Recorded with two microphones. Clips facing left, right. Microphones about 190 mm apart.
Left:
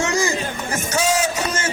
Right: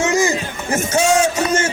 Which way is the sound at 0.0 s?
20° right (ahead or behind).